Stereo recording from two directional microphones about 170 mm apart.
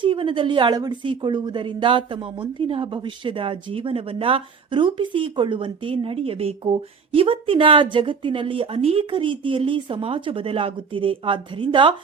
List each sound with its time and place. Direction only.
0.0 s a woman's voice: 30° right (ahead or behind)